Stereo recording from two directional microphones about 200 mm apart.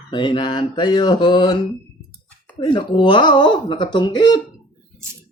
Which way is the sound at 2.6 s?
25° left (ahead or behind).